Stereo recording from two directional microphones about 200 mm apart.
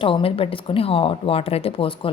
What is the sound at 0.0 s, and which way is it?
A woman's voice, 25° left (ahead or behind).